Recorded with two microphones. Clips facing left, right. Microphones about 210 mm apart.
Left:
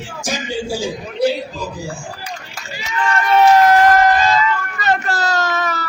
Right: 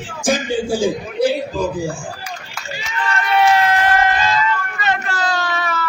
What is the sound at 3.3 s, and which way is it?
Run, 40° left (ahead or behind).